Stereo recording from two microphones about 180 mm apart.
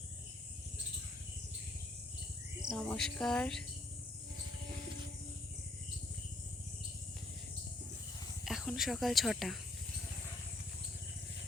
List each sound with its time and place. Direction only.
2.6 s speech: centre (ahead or behind)
8.4 s speech: centre (ahead or behind)